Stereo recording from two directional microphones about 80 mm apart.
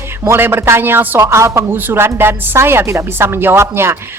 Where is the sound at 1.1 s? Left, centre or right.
Right.